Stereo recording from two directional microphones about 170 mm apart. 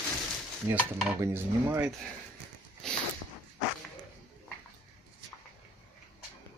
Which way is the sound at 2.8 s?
5° left (ahead or behind).